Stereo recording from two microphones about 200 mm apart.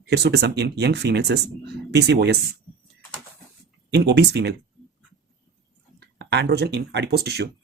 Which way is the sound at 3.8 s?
55° right (ahead or behind).